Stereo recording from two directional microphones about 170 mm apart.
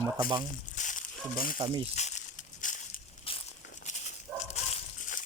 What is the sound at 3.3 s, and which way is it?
Walk, 35° left (ahead or behind).